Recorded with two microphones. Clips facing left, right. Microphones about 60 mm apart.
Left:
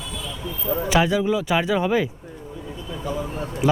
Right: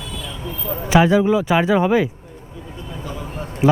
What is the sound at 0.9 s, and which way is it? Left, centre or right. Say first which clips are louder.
Speech: right 6 dB; right.